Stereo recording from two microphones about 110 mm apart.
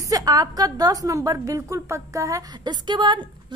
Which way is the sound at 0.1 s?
35° right (ahead or behind).